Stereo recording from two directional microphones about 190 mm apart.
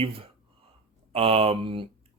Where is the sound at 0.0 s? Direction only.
30° right (ahead or behind).